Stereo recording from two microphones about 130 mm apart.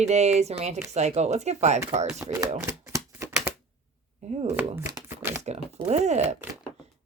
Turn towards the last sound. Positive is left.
turn(degrees=-60)  # may be behind; listen again after turning